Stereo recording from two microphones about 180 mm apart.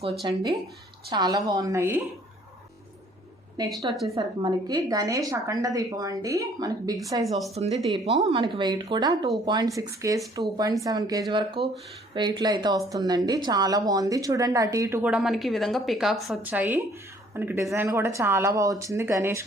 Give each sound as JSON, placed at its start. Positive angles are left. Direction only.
{"t": 0.0, "sound": "speech", "side_deg": -30}
{"t": 3.6, "sound": "speech", "side_deg": -20}
{"t": 7.6, "sound": "speech", "side_deg": -30}